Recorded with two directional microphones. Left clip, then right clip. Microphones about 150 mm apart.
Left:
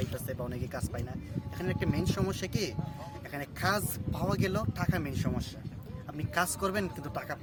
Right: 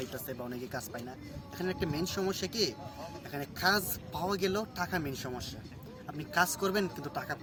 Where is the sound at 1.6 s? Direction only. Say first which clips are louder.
Even; 70° left (ahead or behind).